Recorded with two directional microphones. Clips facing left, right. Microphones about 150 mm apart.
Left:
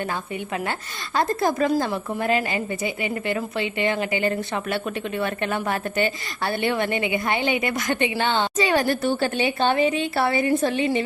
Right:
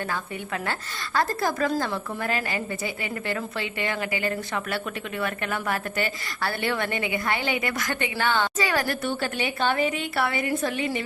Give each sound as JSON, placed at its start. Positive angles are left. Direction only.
{"t": 0.1, "sound": "a woman's voice", "side_deg": 20}